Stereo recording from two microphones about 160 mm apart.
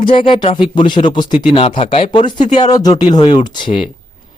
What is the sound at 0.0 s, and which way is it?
Speech, 30° left (ahead or behind).